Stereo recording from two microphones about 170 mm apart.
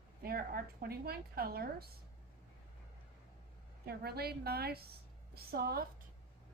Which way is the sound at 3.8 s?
70° right (ahead or behind).